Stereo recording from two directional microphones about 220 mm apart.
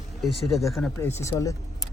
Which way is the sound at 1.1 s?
15° left (ahead or behind).